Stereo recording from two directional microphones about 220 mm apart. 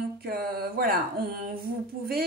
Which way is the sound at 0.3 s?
45° right (ahead or behind).